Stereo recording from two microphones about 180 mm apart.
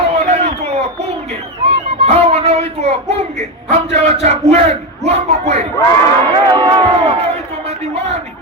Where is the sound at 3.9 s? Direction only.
40° right (ahead or behind).